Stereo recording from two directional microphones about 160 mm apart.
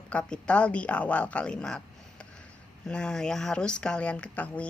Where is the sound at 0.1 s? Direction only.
5° left (ahead or behind).